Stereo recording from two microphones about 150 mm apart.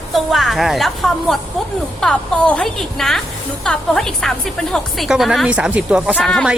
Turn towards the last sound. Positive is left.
turn(degrees=0)  # may be behind; listen again after turning